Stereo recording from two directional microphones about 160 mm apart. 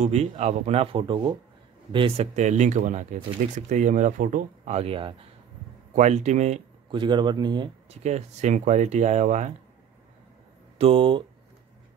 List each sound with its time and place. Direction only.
0.0 s speech: 45° right (ahead or behind)
5.9 s speech: 45° right (ahead or behind)
6.9 s speech: 30° right (ahead or behind)
7.9 s speech: 45° right (ahead or behind)
10.8 s speech: 35° right (ahead or behind)